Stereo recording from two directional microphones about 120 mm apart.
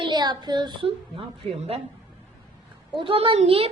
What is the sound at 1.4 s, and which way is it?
Speech, 15° left (ahead or behind).